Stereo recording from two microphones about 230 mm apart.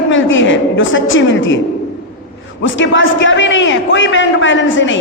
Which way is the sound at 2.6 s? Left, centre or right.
Left.